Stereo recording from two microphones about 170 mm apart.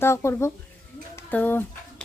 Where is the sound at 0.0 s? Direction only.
15° left (ahead or behind).